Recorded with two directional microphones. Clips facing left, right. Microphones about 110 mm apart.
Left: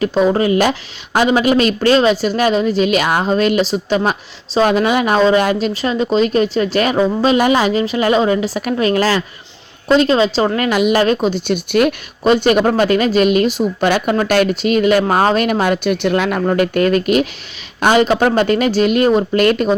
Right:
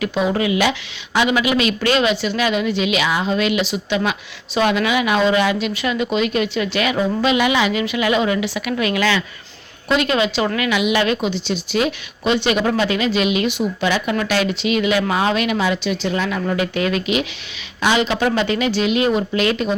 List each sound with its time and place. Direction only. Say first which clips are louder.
0.0 s a woman's voice: left 5 dB; 40° left (ahead or behind); by 16.4 s 60° left (ahead or behind)
16.5 s speech: left 8 dB; 50° left (ahead or behind)